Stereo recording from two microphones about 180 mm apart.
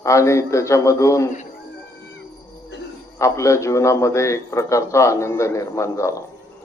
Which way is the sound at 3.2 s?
15° left (ahead or behind).